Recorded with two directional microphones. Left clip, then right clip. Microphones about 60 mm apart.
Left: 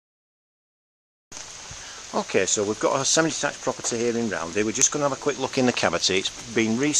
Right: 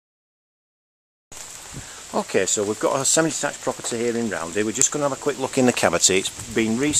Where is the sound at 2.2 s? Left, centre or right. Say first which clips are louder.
Right 1 dB; centre.